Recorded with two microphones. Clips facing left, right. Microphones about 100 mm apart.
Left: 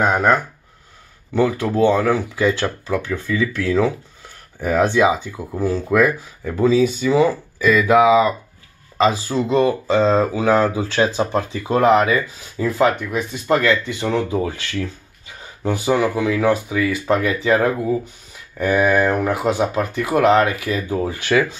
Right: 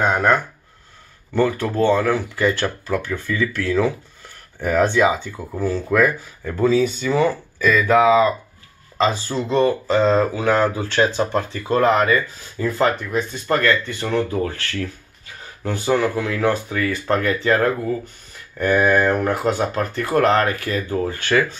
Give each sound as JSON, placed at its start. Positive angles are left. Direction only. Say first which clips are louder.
{"t": 0.0, "sound": "speech", "louder": "left 1 dB", "side_deg": 15}